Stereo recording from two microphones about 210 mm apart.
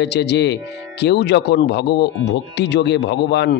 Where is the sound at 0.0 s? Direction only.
55° left (ahead or behind).